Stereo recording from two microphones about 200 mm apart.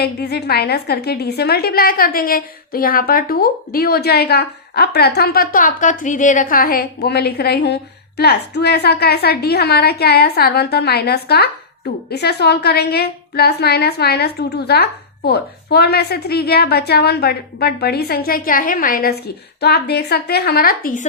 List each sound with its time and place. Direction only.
0.0 s a woman's voice: 55° left (ahead or behind)